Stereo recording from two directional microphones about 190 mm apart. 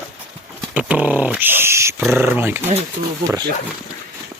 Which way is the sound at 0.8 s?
5° right (ahead or behind).